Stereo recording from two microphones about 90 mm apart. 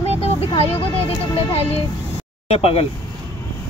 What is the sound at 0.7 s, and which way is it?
Speech, 90° left.